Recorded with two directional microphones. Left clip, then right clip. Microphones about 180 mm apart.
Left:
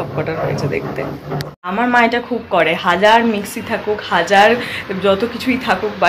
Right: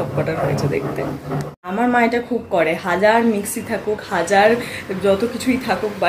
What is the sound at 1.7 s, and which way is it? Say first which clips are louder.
Speech: left 3 dB; 10° right (ahead or behind).